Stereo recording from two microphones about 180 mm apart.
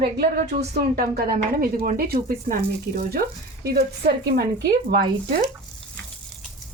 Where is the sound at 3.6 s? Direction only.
60° right (ahead or behind).